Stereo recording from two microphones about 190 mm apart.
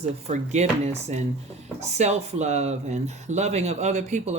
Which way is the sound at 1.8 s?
35° right (ahead or behind).